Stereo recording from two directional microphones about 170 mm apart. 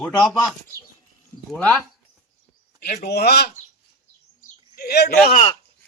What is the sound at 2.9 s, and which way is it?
Speech, 70° left (ahead or behind).